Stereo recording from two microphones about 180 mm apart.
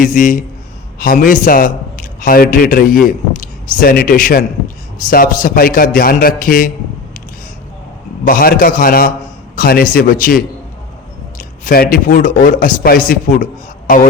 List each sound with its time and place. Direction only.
0.0 s a man's voice: 45° left (ahead or behind)
8.3 s a man's voice: 55° left (ahead or behind)